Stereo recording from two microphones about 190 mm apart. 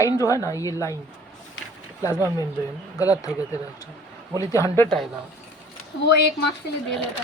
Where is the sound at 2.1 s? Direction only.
10° right (ahead or behind).